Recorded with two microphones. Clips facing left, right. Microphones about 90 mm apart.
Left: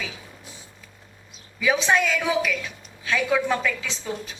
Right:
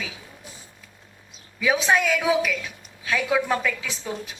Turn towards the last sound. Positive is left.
turn(degrees=-5)  # may be behind; listen again after turning